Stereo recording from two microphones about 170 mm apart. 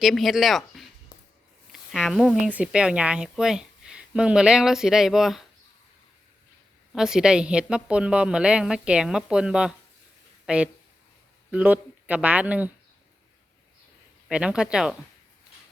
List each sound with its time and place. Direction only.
0.0 s a woman's voice: centre (ahead or behind)
1.9 s a woman's voice: centre (ahead or behind)
6.9 s a woman's voice: 5° right (ahead or behind)
14.3 s a woman's voice: 5° right (ahead or behind)